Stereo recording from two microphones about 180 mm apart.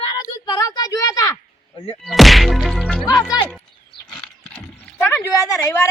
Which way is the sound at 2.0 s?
Centre (ahead or behind).